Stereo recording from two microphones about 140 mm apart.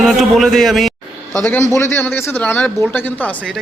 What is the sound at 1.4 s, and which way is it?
Speech, 15° left (ahead or behind).